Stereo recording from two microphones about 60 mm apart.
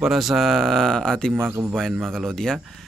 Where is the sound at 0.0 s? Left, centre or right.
Centre.